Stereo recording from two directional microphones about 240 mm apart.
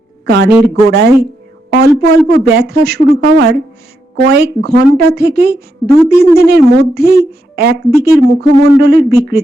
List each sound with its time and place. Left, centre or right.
0.3 s a woman's voice: right